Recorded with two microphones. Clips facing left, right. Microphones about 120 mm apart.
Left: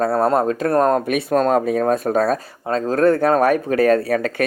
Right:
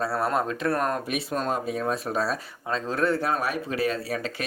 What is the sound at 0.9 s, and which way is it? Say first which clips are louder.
Speech: left 11 dB; 50° left (ahead or behind).